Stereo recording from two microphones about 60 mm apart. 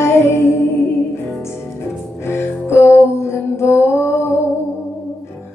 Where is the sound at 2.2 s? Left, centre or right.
Left.